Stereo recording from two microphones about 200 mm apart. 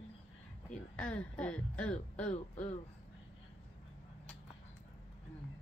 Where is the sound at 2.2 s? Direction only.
35° left (ahead or behind).